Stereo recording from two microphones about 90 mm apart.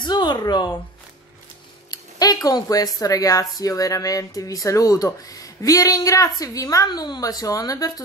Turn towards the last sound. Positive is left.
turn(degrees=40)  # may be behind; listen again after turning